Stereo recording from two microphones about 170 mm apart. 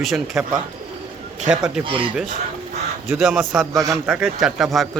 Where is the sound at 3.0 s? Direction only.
5° right (ahead or behind).